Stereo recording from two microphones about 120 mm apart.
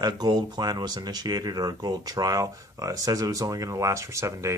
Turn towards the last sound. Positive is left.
turn(degrees=-25)  # may be behind; listen again after turning